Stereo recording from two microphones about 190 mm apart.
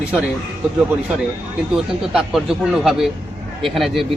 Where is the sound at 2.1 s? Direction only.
5° right (ahead or behind).